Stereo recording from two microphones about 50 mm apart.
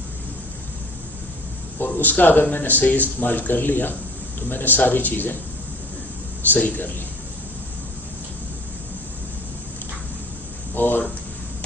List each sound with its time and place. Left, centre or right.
1.8 s speech: left
6.5 s speech: left
10.8 s speech: left